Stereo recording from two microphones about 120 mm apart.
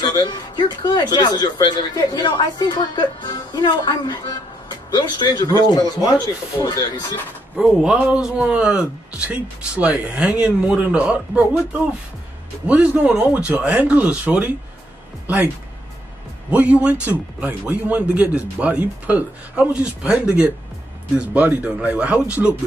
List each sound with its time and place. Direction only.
0.0 s speech: 35° left (ahead or behind)
7.5 s a man's voice: centre (ahead or behind)
12.6 s a man's voice: 10° right (ahead or behind)